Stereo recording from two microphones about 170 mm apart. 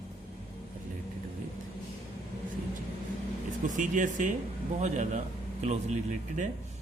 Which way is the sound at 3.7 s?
50° right (ahead or behind).